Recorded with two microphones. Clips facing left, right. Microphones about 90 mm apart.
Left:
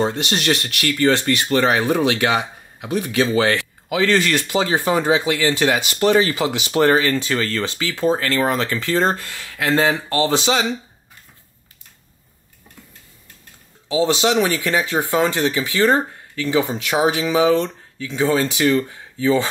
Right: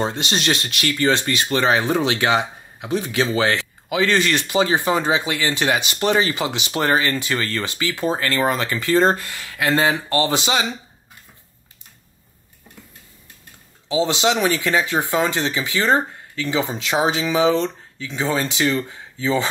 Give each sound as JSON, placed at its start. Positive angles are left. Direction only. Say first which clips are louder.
{"t": 0.0, "sound": "speech", "louder": "left 2 dB", "side_deg": -20}
{"t": 13.8, "sound": "speech", "louder": "left 1 dB", "side_deg": -20}